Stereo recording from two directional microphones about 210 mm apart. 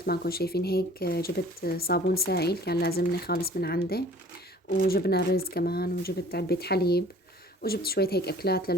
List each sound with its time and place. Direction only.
0.0 s speech: 45° left (ahead or behind)